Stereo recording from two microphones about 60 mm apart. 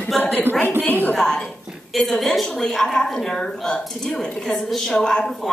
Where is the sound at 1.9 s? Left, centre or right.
Centre.